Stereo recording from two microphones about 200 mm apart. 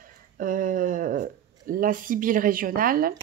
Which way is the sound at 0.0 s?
45° right (ahead or behind).